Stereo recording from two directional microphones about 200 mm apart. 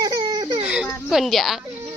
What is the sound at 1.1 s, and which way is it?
Speech, centre (ahead or behind).